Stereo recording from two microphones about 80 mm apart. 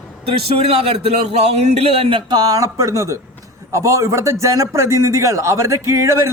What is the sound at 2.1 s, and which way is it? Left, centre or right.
A man's voice, right.